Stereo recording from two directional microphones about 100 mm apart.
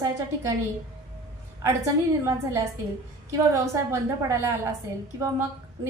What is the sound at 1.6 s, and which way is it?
A woman's voice, 30° right (ahead or behind).